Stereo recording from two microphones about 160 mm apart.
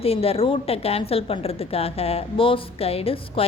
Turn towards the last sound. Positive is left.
turn(degrees=35)  # may be behind; listen again after turning